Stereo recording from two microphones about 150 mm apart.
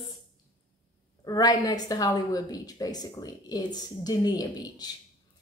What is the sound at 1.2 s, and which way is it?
A woman's voice, 25° left (ahead or behind).